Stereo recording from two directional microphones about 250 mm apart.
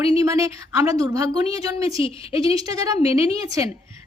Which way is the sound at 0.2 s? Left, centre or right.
Centre.